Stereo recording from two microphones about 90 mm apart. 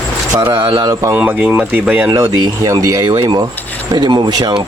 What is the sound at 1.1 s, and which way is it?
Speech, 20° right (ahead or behind).